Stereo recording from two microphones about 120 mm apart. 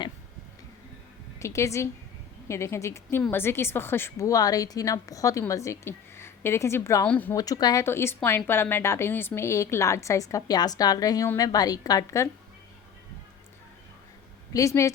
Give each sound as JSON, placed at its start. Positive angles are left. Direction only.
{"t": 1.4, "sound": "a woman's voice", "side_deg": 25}
{"t": 7.3, "sound": "a woman's voice", "side_deg": 30}
{"t": 7.9, "sound": "a woman's voice", "side_deg": 20}
{"t": 14.5, "sound": "a woman's voice", "side_deg": 25}